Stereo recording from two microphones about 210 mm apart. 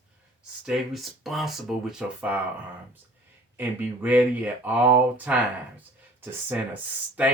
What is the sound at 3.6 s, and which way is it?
Speech, 10° right (ahead or behind).